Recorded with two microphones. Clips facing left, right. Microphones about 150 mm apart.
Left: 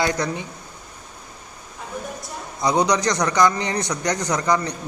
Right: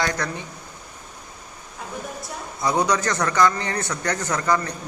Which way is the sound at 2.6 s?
15° left (ahead or behind).